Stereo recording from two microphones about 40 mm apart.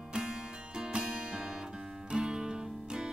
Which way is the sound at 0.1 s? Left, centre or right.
Centre.